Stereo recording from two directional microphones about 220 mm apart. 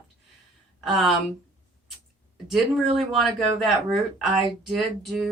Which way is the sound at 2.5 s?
Centre (ahead or behind).